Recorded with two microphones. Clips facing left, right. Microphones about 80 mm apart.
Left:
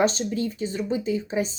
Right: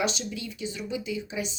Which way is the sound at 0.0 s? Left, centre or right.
Left.